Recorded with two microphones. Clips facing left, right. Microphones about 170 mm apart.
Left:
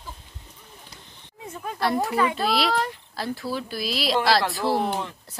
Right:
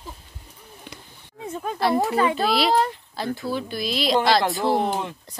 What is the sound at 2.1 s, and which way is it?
Speech, 30° right (ahead or behind).